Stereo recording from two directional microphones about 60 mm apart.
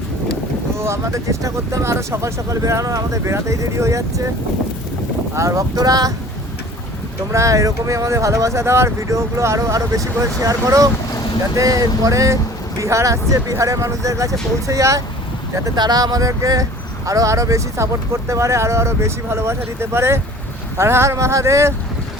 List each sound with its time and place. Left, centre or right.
0.8 s speech: right
5.3 s speech: right
7.3 s speech: right
15.5 s speech: right